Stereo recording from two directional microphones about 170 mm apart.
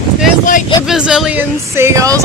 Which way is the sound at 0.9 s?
5° right (ahead or behind).